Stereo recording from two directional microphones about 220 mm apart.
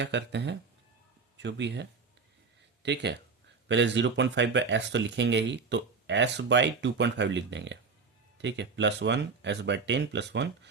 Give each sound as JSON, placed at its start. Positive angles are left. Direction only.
{"t": 0.0, "sound": "speech", "side_deg": -50}